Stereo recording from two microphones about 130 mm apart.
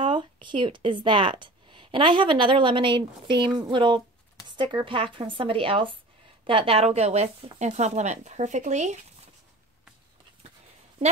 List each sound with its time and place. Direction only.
0.0 s speech: 40° right (ahead or behind); by 9.0 s 60° right (ahead or behind)